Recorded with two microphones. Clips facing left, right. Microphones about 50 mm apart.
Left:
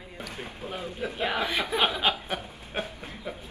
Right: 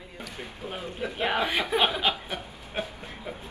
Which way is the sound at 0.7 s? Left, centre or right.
Right.